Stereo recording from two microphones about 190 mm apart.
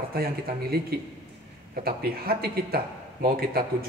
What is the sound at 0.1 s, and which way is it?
Speech, 50° right (ahead or behind).